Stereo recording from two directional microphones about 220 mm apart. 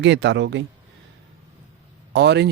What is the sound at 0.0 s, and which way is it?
Speech, 55° right (ahead or behind).